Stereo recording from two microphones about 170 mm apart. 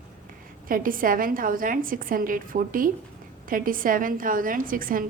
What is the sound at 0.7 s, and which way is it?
A woman's voice, 55° right (ahead or behind).